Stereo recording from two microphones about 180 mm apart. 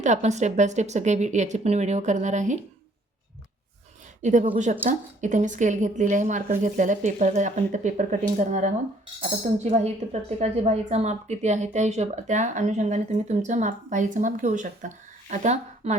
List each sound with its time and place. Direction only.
0.0 s a woman's voice: 40° right (ahead or behind)
4.2 s a woman's voice: 40° right (ahead or behind)
9.7 s a woman's voice: 40° right (ahead or behind)